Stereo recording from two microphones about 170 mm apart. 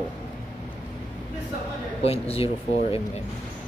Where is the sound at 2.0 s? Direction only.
35° left (ahead or behind).